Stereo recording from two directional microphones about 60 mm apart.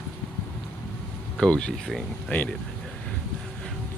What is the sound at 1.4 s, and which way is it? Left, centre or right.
Speech, centre.